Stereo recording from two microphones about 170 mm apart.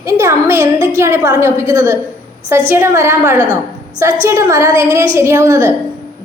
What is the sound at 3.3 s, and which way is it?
Speech, 15° left (ahead or behind).